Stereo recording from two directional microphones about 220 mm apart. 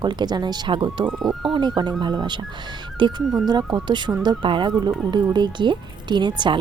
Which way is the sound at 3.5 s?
20° right (ahead or behind).